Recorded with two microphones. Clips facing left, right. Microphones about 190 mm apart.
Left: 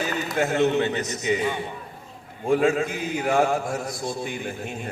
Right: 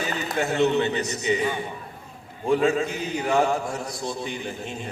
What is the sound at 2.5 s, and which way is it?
A man's voice, 50° left (ahead or behind).